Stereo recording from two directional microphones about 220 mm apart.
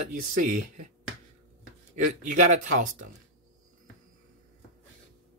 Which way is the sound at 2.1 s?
35° right (ahead or behind).